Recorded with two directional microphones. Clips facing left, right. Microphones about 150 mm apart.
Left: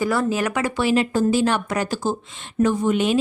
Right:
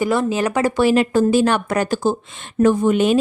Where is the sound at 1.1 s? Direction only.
55° right (ahead or behind).